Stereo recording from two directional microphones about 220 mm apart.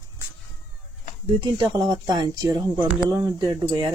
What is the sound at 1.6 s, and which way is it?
Speech, 20° right (ahead or behind).